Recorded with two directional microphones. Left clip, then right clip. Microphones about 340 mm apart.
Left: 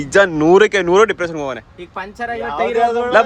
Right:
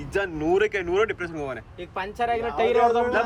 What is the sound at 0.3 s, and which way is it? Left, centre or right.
Speech, centre.